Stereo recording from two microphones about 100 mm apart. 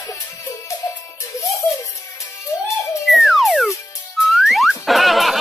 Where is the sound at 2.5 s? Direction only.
30° left (ahead or behind).